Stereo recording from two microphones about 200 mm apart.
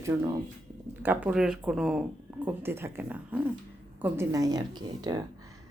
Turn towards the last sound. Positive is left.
turn(degrees=-20)  # may be behind; listen again after turning